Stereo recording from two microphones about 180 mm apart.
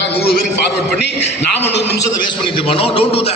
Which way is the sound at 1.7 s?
70° left (ahead or behind).